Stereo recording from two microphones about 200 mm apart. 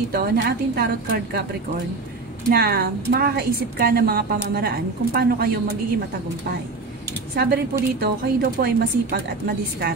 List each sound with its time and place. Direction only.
0.1 s a woman's voice: 45° right (ahead or behind)
2.5 s a woman's voice: 50° right (ahead or behind)
7.3 s a woman's voice: 50° right (ahead or behind)